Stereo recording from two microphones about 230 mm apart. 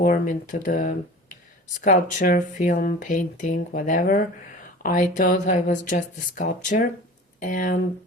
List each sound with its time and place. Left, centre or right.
0.0 s speech: left